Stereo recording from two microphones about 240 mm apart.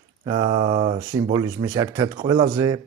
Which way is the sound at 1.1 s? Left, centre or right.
Centre.